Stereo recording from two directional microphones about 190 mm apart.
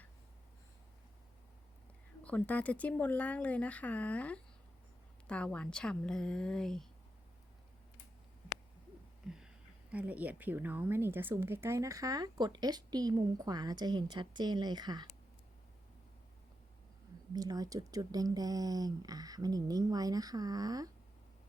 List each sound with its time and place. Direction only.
2.2 s a woman's voice: 10° left (ahead or behind)
9.2 s a sound: centre (ahead or behind)
9.9 s a woman's voice: 10° right (ahead or behind)
17.3 s a woman's voice: 20° right (ahead or behind)